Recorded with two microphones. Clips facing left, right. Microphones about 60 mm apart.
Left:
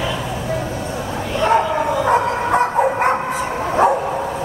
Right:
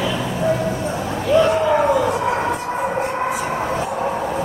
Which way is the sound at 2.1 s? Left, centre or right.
Left.